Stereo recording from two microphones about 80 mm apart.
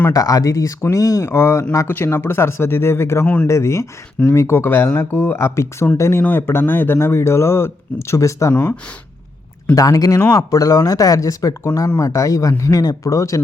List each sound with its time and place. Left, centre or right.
0.1 s speech: left
9.7 s speech: left